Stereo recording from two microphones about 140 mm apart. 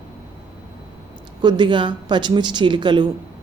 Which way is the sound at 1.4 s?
35° right (ahead or behind).